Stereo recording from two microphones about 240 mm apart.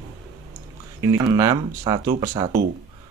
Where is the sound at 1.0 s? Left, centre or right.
Centre.